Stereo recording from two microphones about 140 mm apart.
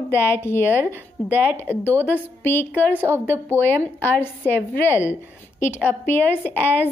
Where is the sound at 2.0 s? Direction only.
15° left (ahead or behind).